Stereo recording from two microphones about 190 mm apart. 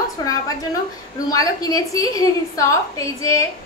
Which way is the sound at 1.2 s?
20° left (ahead or behind).